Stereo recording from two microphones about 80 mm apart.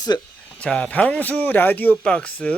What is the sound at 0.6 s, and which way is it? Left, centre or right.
Speech, centre.